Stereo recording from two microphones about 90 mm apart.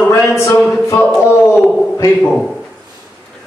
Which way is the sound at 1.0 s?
15° left (ahead or behind).